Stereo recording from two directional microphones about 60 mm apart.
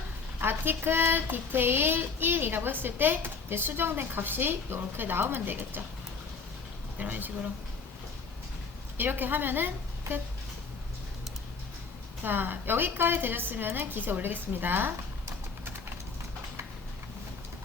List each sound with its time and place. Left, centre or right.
0.3 s child singing: right
7.0 s child singing: right
9.0 s a woman's voice: right
12.2 s child singing: right